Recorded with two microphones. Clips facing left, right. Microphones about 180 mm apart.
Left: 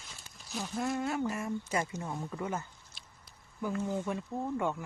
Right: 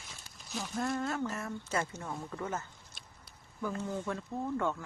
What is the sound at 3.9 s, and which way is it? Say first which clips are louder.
Speech: left 2 dB; 15° left (ahead or behind).